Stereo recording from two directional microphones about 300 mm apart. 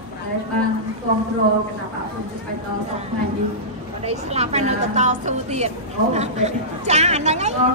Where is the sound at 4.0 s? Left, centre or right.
Right.